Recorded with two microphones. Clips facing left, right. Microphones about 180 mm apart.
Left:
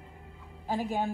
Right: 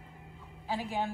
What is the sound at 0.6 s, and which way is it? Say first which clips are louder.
Speech: left 3 dB; 45° left (ahead or behind).